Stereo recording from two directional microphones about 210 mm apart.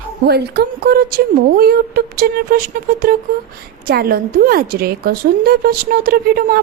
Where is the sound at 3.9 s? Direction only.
45° right (ahead or behind).